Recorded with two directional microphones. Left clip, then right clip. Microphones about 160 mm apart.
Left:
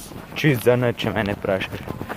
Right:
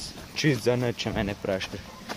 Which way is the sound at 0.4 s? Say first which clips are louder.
Left 7 dB; 15° right (ahead or behind).